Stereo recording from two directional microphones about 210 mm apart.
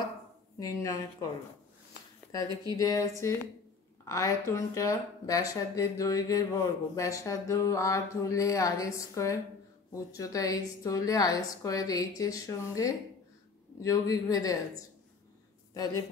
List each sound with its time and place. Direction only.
0.6 s speech: 15° left (ahead or behind)
2.7 s speech: 15° left (ahead or behind)
15.7 s speech: 15° left (ahead or behind)